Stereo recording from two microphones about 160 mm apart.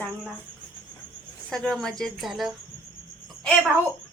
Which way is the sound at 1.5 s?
Centre (ahead or behind).